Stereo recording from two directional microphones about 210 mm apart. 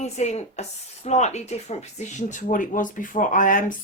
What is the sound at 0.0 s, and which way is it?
Speech, 30° left (ahead or behind).